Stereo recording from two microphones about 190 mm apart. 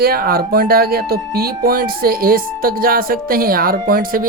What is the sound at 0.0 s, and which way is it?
Speech, 50° right (ahead or behind).